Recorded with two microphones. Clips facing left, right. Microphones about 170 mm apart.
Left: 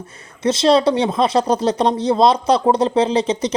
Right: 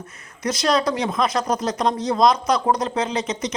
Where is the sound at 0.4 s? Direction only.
25° left (ahead or behind).